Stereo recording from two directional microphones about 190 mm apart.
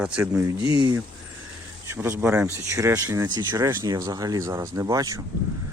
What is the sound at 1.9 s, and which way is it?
Speech, 10° right (ahead or behind).